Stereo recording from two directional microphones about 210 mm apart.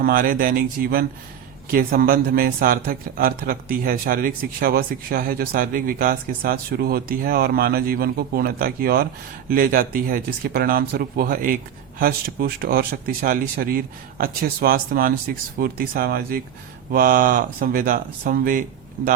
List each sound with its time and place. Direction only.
0.0 s a man's voice: 40° right (ahead or behind)